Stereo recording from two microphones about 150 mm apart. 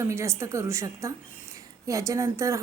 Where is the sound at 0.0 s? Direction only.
20° right (ahead or behind).